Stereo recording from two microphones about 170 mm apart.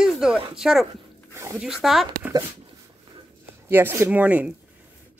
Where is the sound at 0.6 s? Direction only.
Centre (ahead or behind).